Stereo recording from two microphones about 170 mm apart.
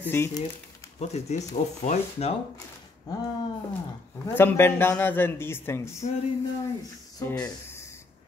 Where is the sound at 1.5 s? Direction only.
40° left (ahead or behind).